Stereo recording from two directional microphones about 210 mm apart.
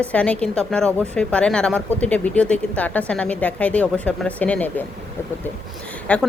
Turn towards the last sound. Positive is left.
turn(degrees=5)  # may be behind; listen again after turning